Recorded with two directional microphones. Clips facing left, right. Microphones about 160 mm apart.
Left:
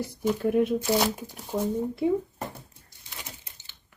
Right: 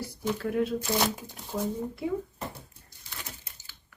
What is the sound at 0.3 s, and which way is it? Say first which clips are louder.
Speech: left 5 dB; 20° left (ahead or behind).